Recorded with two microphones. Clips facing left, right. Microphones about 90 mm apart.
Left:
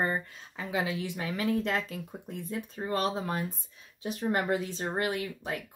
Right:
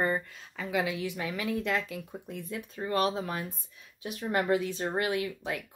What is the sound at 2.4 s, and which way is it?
Speech, 30° left (ahead or behind).